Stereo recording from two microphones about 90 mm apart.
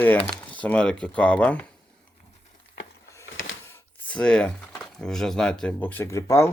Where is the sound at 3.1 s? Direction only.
30° left (ahead or behind).